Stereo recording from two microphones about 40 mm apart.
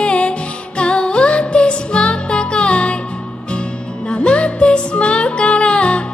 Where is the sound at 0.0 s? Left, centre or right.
Left.